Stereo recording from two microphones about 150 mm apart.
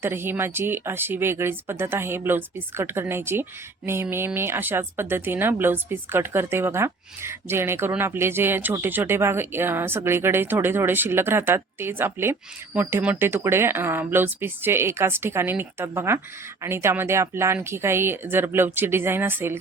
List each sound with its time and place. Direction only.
0.0 s a woman's voice: 15° right (ahead or behind)